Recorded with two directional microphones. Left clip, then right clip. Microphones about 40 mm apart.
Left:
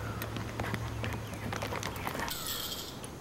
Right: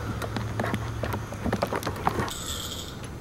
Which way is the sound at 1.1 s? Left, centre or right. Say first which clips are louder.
Right 8 dB; left.